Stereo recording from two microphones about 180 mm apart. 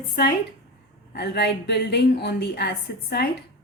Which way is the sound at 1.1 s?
70° left (ahead or behind).